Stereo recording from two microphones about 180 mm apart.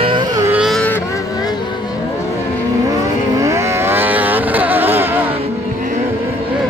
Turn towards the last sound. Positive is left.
turn(degrees=-10)  # may be behind; listen again after turning